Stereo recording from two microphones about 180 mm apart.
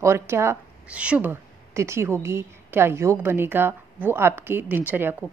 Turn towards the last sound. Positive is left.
turn(degrees=-10)  # may be behind; listen again after turning